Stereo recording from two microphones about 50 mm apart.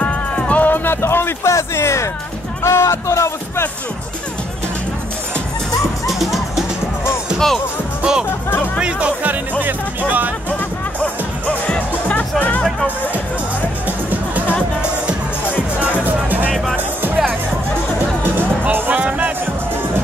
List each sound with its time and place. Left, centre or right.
0.0 s music: left
0.8 s speech: left
1.5 s speech: left
6.0 s music: centre
7.3 s speech: centre
8.0 s speech: centre
9.2 s speech: right
11.0 s music: left
14.8 s music: right
16.0 s music: right
18.9 s music: right